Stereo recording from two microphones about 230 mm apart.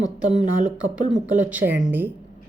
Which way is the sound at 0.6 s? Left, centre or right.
Right.